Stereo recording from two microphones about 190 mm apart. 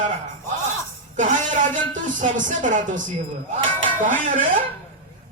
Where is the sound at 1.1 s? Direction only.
40° right (ahead or behind).